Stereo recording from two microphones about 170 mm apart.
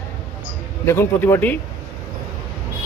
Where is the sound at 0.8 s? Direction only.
15° left (ahead or behind).